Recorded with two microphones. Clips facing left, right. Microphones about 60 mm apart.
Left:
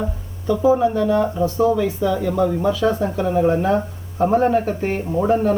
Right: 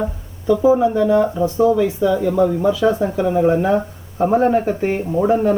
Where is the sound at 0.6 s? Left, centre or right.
Right.